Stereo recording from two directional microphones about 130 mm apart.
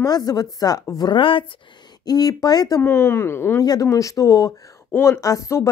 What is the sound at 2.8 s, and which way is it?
Speech, 20° left (ahead or behind).